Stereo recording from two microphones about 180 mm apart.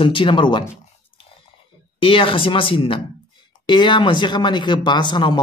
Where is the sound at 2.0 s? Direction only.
30° left (ahead or behind).